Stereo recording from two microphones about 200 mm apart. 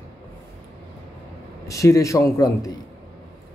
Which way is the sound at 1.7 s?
15° left (ahead or behind).